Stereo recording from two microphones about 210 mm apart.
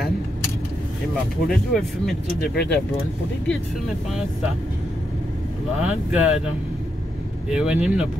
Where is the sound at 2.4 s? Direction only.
50° left (ahead or behind).